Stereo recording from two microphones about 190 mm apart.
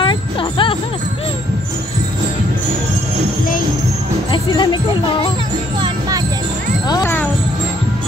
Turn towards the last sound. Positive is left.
turn(degrees=15)  # may be behind; listen again after turning